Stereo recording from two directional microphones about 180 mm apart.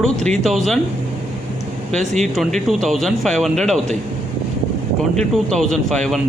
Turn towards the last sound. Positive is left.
turn(degrees=0)  # may be behind; listen again after turning